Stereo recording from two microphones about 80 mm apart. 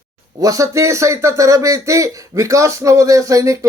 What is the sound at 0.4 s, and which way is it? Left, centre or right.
Speech, right.